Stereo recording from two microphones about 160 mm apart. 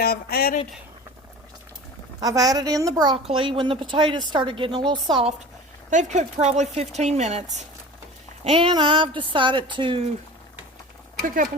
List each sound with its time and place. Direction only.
0.0 s speech: 75° left (ahead or behind)
2.2 s a woman's voice: 25° right (ahead or behind)
3.2 s speech: 35° right (ahead or behind)
5.9 s speech: 50° right (ahead or behind)
8.4 s speech: 35° right (ahead or behind)